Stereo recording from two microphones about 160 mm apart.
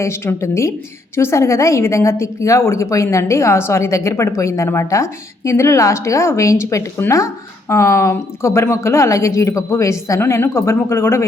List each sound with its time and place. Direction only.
0.0 s a woman's voice: 15° left (ahead or behind)